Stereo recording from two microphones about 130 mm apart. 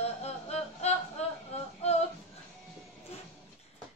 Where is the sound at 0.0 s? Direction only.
55° left (ahead or behind).